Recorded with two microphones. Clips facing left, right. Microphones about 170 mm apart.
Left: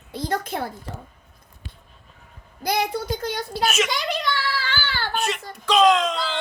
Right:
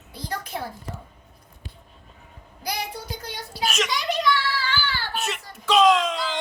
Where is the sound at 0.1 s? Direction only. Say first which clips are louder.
Left 6 dB; 80° left.